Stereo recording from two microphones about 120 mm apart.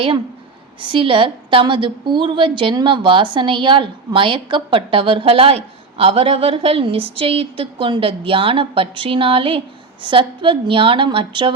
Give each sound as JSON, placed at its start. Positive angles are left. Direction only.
{"t": 0.8, "sound": "a woman's voice", "side_deg": -45}